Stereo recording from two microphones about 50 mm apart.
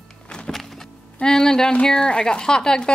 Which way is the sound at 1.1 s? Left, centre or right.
Centre.